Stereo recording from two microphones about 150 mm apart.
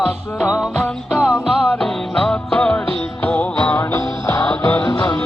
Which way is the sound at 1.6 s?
5° left (ahead or behind).